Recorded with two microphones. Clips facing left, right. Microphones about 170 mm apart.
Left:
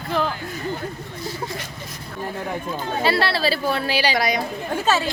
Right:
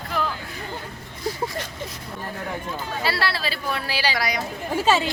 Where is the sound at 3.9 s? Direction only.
20° left (ahead or behind).